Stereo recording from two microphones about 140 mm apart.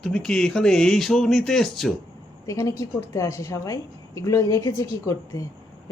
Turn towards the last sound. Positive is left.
turn(degrees=20)  # may be behind; listen again after turning